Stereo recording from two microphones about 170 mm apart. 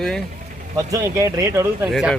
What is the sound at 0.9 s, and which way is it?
Speech, 20° right (ahead or behind).